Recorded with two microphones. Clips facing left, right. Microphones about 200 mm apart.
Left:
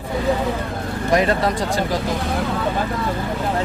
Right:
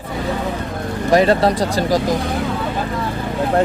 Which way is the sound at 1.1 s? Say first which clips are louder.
Right 5 dB; 30° right (ahead or behind).